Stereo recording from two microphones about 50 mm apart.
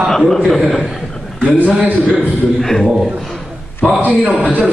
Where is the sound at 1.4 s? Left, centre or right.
Right.